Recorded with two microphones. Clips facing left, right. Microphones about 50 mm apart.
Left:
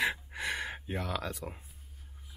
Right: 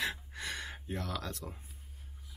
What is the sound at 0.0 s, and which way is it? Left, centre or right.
Gasp, centre.